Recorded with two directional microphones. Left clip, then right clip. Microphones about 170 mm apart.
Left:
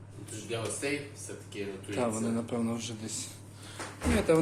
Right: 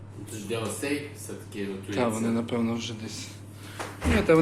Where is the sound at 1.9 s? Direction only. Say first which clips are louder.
Right 4 dB; 10° left (ahead or behind).